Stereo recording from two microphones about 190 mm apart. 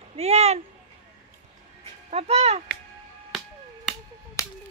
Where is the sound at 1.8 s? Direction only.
35° right (ahead or behind).